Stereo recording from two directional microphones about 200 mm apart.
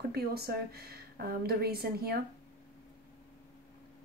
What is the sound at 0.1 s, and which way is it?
A woman's voice, 50° right (ahead or behind).